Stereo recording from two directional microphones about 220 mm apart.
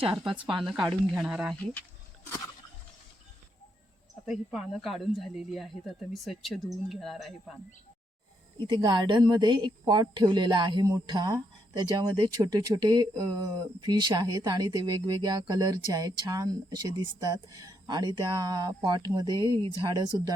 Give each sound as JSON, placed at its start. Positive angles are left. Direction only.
{"t": 0.0, "sound": "speech", "side_deg": -25}
{"t": 0.6, "sound": "speech", "side_deg": 0}
{"t": 4.3, "sound": "speech", "side_deg": 0}
{"t": 8.5, "sound": "speech", "side_deg": -20}